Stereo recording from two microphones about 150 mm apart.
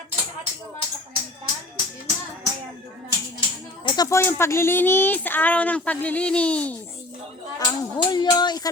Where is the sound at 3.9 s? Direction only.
25° left (ahead or behind).